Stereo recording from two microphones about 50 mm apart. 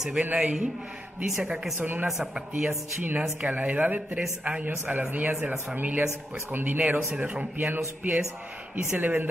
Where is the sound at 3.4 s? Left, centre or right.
Right.